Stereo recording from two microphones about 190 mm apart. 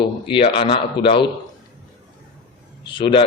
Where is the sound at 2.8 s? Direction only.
30° left (ahead or behind).